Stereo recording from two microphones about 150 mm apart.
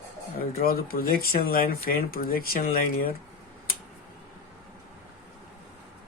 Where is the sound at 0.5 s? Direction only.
90° left.